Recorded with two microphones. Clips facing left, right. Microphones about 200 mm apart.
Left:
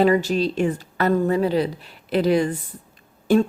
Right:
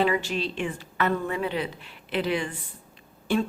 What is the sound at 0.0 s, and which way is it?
A woman's voice, 40° left (ahead or behind).